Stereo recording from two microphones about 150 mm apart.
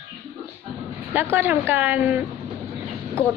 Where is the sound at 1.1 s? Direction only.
15° right (ahead or behind).